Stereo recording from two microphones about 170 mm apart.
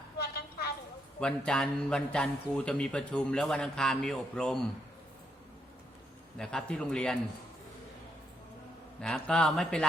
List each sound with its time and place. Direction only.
0.2 s a sound: 70° left (ahead or behind)
1.2 s a man's voice: 5° left (ahead or behind)
6.3 s a man's voice: 5° left (ahead or behind)
9.0 s a man's voice: 5° left (ahead or behind)